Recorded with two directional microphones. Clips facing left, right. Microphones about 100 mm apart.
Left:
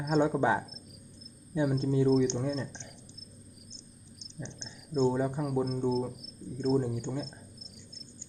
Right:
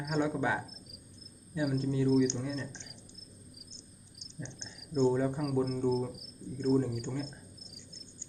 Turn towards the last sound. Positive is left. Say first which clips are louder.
# even
turn(degrees=20)  # may be behind; listen again after turning